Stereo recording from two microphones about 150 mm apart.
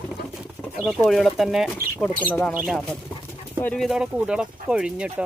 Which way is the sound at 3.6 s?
5° left (ahead or behind).